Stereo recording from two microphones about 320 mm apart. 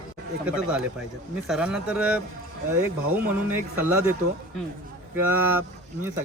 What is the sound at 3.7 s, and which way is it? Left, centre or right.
Speech, centre.